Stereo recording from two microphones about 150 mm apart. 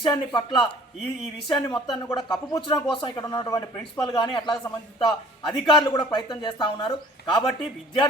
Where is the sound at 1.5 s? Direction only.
30° left (ahead or behind).